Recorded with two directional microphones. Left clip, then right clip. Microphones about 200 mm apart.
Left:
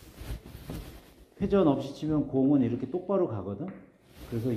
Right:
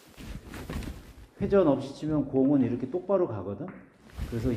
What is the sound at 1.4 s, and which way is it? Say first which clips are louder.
A man's voice: right 2 dB; 40° left (ahead or behind).